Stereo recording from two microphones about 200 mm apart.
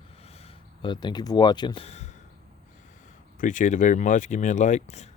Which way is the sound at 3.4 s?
40° left (ahead or behind).